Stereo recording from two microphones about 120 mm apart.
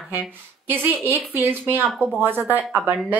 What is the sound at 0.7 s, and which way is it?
Speech, 15° right (ahead or behind).